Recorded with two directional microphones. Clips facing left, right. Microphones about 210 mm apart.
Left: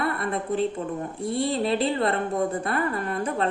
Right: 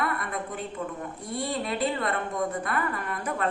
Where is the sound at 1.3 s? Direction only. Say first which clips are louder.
Left 6 dB; 30° left (ahead or behind).